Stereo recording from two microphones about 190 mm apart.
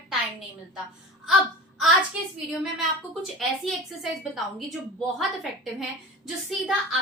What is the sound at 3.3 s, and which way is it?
A woman's voice, centre (ahead or behind).